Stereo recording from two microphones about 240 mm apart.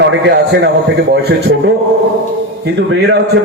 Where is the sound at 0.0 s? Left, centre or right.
Right.